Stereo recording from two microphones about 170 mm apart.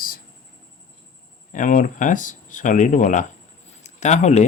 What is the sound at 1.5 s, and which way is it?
Speech, 50° left (ahead or behind).